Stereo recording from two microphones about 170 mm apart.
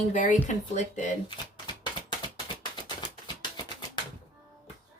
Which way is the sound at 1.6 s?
25° left (ahead or behind).